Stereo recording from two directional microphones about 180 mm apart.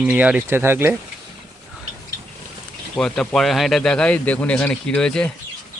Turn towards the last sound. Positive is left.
turn(degrees=5)  # may be behind; listen again after turning